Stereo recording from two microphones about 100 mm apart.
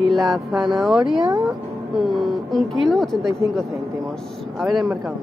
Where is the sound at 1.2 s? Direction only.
40° right (ahead or behind).